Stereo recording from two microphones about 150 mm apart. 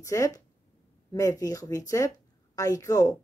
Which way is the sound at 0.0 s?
20° left (ahead or behind).